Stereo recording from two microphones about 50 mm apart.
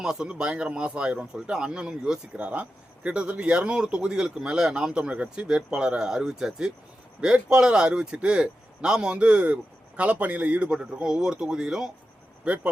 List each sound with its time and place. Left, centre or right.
0.0 s speech: centre